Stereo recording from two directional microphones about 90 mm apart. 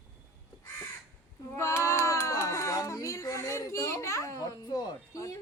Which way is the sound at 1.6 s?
35° left (ahead or behind).